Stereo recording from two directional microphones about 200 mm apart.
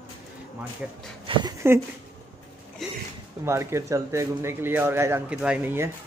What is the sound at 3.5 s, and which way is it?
A man's voice, 15° right (ahead or behind).